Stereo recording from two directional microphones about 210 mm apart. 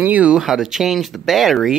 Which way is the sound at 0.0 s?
5° right (ahead or behind).